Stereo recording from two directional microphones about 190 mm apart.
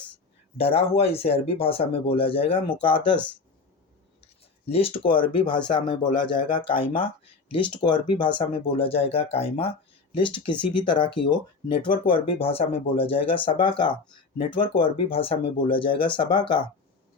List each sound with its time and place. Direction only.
0.5 s speech: 30° left (ahead or behind)
4.7 s speech: 30° left (ahead or behind)